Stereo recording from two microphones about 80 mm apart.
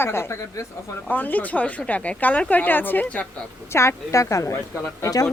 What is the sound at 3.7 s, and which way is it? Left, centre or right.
A woman's voice, left.